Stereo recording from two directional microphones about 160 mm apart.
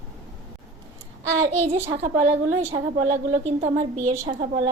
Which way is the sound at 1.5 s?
40° right (ahead or behind).